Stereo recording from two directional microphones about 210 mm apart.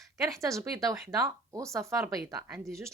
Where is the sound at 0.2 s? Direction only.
15° right (ahead or behind).